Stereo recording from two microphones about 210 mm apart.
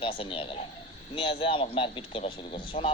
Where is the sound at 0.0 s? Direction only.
25° left (ahead or behind).